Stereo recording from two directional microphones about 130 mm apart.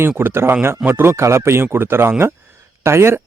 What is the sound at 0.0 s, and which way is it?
Speech, 15° right (ahead or behind).